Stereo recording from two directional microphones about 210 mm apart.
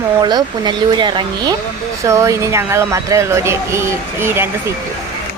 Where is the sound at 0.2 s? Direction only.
20° right (ahead or behind).